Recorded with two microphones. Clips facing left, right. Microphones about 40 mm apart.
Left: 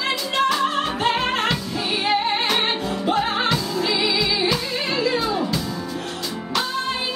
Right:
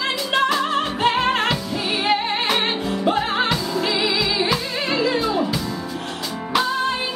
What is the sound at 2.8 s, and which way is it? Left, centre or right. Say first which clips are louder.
Music: right 1 dB; centre.